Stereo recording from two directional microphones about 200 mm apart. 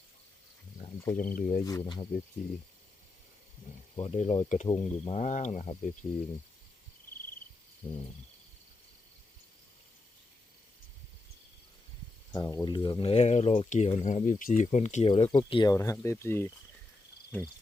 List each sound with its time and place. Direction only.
1.1 s speech: 40° left (ahead or behind)
1.6 s speech: 20° left (ahead or behind)
3.9 s speech: 30° left (ahead or behind)
7.8 s speech: 25° left (ahead or behind)
12.3 s speech: 15° left (ahead or behind)